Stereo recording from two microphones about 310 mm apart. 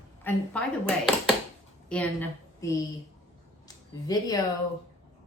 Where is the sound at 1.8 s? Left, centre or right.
Centre.